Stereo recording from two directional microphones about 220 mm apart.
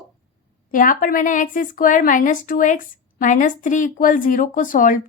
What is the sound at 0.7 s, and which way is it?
A woman's voice, 40° left (ahead or behind).